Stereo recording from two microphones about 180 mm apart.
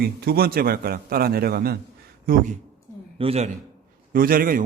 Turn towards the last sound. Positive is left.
turn(degrees=-50)  # may be behind; listen again after turning